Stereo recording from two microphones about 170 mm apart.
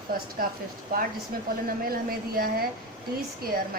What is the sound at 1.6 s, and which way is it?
A woman's voice, 60° right (ahead or behind).